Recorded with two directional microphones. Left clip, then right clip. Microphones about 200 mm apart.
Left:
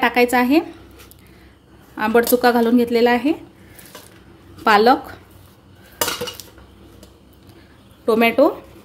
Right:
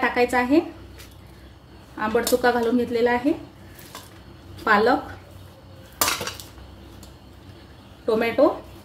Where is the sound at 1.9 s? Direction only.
45° left (ahead or behind).